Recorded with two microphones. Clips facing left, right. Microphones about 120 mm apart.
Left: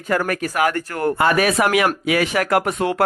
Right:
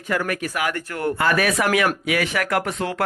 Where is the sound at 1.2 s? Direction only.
25° left (ahead or behind).